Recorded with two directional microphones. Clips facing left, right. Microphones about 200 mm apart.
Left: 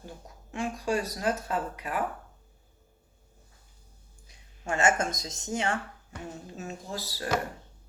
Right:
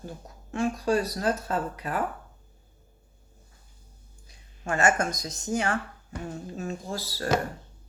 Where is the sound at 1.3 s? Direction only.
35° right (ahead or behind).